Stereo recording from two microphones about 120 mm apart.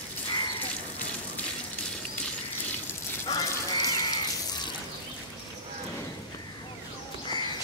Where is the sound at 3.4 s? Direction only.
30° left (ahead or behind).